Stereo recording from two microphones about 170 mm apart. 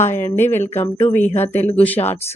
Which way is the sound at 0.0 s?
15° left (ahead or behind).